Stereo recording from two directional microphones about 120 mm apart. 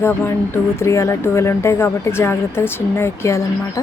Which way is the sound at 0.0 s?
20° left (ahead or behind).